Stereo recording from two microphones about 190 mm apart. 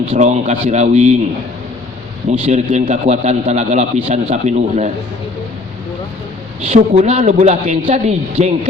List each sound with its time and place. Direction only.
0.1 s a man's voice: 40° right (ahead or behind)
2.4 s a man's voice: 35° right (ahead or behind)
6.7 s a man's voice: 35° right (ahead or behind)